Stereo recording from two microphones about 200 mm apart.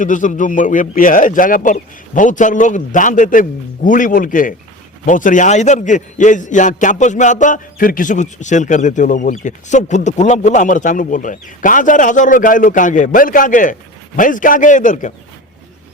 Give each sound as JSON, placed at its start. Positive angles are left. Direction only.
{"t": 0.0, "sound": "a man's voice", "side_deg": 40}